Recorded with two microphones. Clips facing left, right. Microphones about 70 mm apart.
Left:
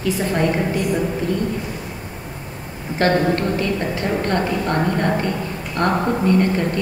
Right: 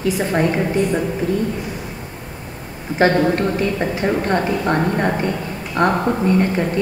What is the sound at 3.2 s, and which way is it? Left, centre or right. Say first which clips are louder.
A woman's voice: right 2 dB; centre.